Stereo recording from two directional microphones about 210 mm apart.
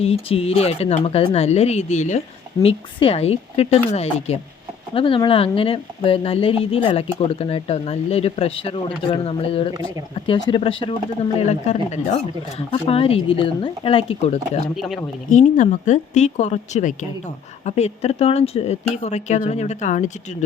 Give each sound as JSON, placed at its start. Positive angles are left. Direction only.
{"t": 0.0, "sound": "speech", "side_deg": 30}
{"t": 14.8, "sound": "speech", "side_deg": 0}
{"t": 15.3, "sound": "speech", "side_deg": 35}